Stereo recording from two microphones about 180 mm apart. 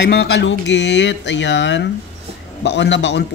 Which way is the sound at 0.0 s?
65° left (ahead or behind).